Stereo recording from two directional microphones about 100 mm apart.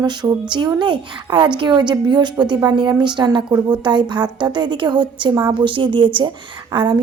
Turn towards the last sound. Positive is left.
turn(degrees=-50)  # may be behind; listen again after turning